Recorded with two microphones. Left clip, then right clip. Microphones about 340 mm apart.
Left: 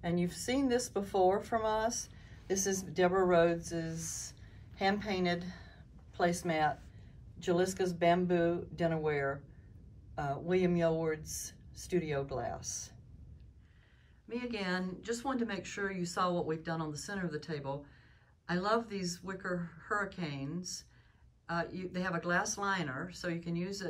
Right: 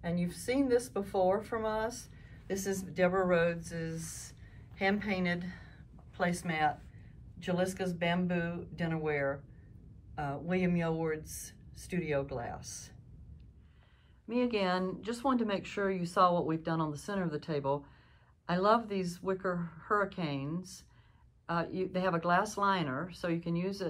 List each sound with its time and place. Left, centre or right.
0.0 s speech: centre
14.2 s speech: centre